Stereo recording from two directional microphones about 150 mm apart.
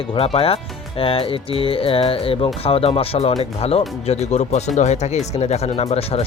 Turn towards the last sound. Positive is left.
turn(degrees=45)  # may be behind; listen again after turning